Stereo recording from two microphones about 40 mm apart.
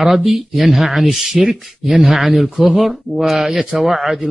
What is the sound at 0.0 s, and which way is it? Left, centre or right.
A man's voice, centre.